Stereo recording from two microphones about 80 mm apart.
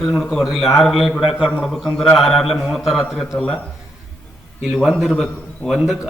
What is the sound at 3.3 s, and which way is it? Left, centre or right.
Speech, centre.